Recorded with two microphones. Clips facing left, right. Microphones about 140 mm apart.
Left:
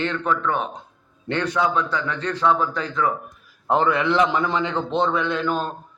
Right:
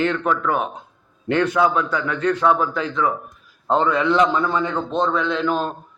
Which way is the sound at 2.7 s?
40° left (ahead or behind).